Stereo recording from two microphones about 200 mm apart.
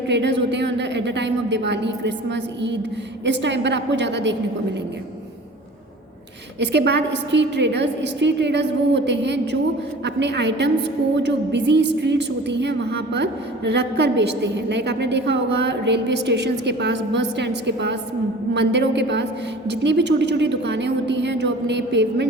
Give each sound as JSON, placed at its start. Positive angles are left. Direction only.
{"t": 0.1, "sound": "a woman's voice", "side_deg": -60}
{"t": 6.6, "sound": "a woman's voice", "side_deg": -60}